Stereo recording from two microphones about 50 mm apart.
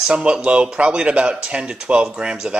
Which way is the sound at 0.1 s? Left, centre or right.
Right.